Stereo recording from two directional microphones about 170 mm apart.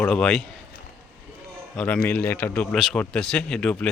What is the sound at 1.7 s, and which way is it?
Speech, 10° left (ahead or behind).